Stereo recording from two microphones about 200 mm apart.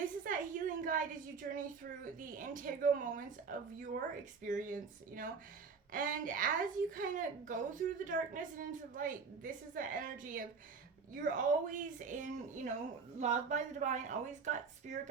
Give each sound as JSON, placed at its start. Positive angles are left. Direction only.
{"t": 0.3, "sound": "a woman's voice", "side_deg": -40}